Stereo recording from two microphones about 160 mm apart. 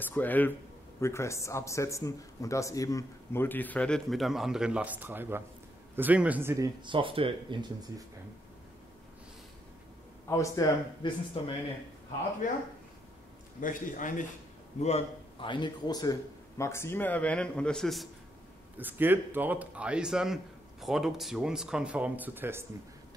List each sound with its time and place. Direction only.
0.0 s a man's voice: 10° left (ahead or behind); by 7.3 s 35° right (ahead or behind)
10.2 s speech: 20° left (ahead or behind)
13.6 s a man's voice: 55° left (ahead or behind)
14.8 s a man's voice: 40° left (ahead or behind)
15.5 s a man's voice: 25° left (ahead or behind); by 18.0 s 5° left (ahead or behind)
18.8 s speech: 10° right (ahead or behind)